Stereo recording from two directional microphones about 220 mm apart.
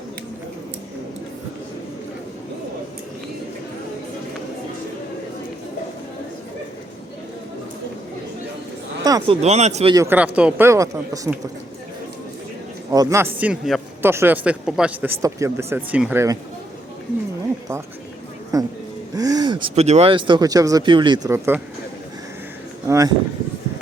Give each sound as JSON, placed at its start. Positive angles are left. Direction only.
{"t": 9.0, "sound": "speech", "side_deg": -20}
{"t": 9.9, "sound": "speech", "side_deg": -10}
{"t": 12.9, "sound": "a man's voice", "side_deg": -15}
{"t": 18.5, "sound": "speech", "side_deg": -15}
{"t": 22.9, "sound": "speech", "side_deg": -15}